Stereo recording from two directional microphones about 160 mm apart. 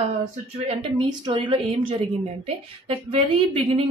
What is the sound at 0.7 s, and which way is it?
A woman's voice, 30° right (ahead or behind).